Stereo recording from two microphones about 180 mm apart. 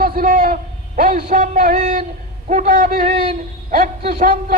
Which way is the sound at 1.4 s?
45° right (ahead or behind).